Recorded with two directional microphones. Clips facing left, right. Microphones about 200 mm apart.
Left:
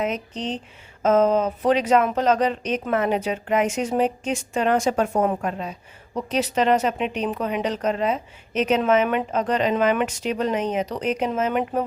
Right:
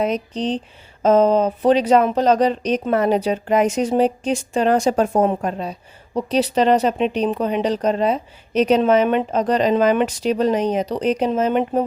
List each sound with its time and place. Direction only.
0.0 s a woman's voice: 35° right (ahead or behind)